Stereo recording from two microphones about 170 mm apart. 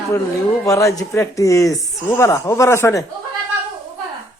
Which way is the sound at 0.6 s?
20° left (ahead or behind).